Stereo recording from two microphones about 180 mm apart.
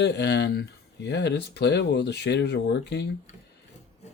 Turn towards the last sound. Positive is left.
turn(degrees=70)  # may be behind; listen again after turning